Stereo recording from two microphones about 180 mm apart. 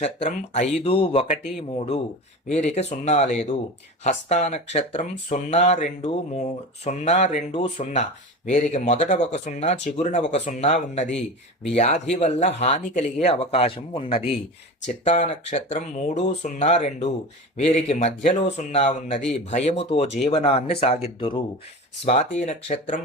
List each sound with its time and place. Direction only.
0.0 s speech: 40° left (ahead or behind)
8.4 s speech: 40° left (ahead or behind)
14.8 s speech: 45° left (ahead or behind)
22.0 s speech: 40° left (ahead or behind)